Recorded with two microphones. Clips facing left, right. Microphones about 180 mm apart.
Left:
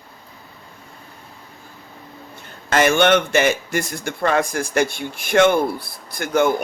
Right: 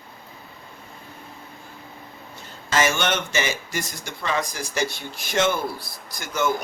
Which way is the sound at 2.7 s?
60° left (ahead or behind).